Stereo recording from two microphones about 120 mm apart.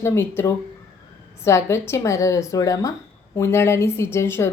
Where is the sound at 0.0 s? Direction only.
20° left (ahead or behind).